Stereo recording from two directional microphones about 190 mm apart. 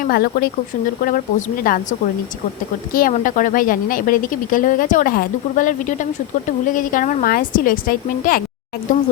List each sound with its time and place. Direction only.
0.1 s a woman's voice: 50° left (ahead or behind)